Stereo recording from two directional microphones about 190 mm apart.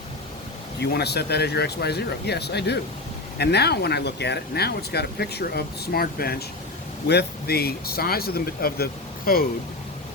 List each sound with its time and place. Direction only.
0.8 s speech: 60° left (ahead or behind)